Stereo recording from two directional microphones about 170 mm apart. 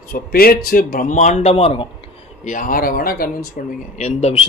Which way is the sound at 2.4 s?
50° left (ahead or behind).